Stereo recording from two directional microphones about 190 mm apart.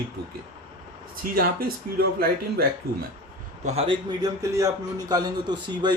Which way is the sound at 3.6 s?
30° right (ahead or behind).